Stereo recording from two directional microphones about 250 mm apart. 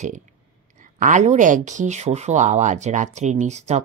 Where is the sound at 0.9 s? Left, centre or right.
Right.